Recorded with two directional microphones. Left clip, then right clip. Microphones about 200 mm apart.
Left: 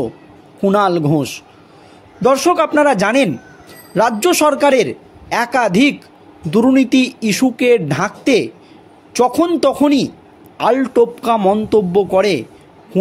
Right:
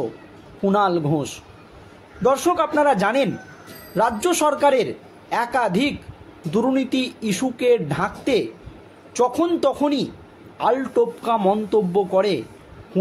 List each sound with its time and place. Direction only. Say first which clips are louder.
0.6 s speech: left 5 dB; 40° left (ahead or behind)